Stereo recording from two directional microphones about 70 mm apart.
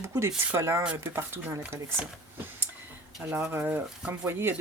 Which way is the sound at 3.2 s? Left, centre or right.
Right.